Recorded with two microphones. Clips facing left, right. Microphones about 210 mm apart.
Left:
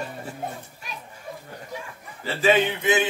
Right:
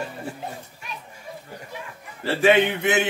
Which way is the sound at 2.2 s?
65° right (ahead or behind).